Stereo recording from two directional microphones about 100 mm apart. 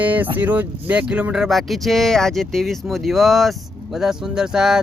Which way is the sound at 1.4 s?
Centre (ahead or behind).